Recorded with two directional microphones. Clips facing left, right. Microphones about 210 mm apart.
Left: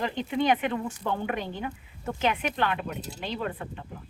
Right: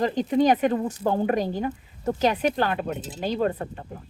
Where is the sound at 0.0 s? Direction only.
40° right (ahead or behind).